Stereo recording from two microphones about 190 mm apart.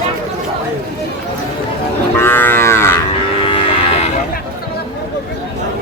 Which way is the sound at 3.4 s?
30° left (ahead or behind).